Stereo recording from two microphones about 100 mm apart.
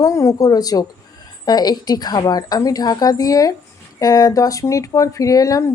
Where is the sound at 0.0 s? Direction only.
30° left (ahead or behind).